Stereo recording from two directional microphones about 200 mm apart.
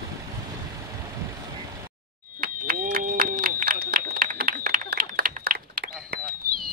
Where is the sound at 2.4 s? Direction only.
45° right (ahead or behind).